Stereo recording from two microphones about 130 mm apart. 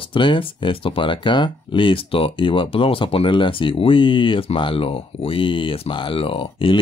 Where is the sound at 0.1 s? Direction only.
40° left (ahead or behind).